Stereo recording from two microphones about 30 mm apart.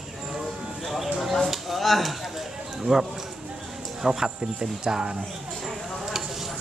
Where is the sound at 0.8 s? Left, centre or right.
Centre.